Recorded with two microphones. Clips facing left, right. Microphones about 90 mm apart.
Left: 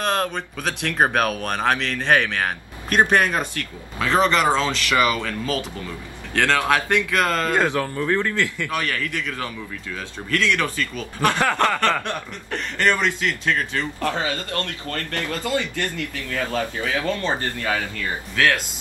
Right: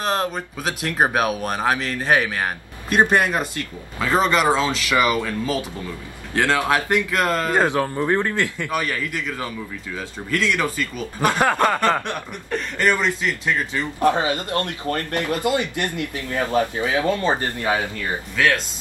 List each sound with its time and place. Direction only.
0.0 s speech: 10° right (ahead or behind)
12.4 s a man's voice: 5° right (ahead or behind)